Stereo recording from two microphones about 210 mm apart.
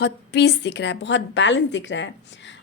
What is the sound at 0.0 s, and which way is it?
A woman's voice, 55° left (ahead or behind).